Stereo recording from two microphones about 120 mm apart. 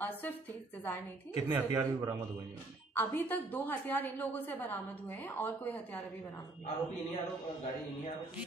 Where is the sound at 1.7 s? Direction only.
30° right (ahead or behind).